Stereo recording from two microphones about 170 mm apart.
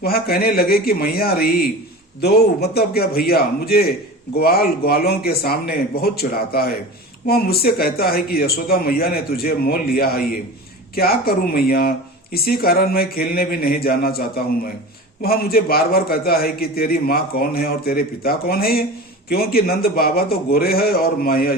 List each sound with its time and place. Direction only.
0.0 s speech: 65° left (ahead or behind)